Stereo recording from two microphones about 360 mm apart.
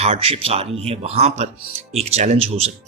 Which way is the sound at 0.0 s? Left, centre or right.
Centre.